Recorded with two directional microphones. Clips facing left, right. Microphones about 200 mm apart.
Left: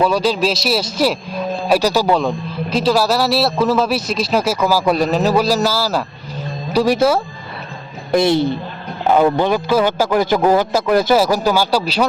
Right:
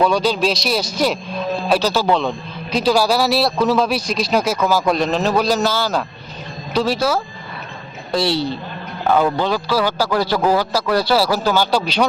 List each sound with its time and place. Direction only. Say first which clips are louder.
0.0 s a man's voice: left 1 dB; 5° left (ahead or behind)
8.1 s a man's voice: left 5 dB; 20° left (ahead or behind)